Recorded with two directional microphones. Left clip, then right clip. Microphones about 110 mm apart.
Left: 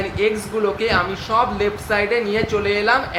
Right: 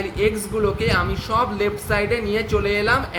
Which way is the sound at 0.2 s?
45° right (ahead or behind).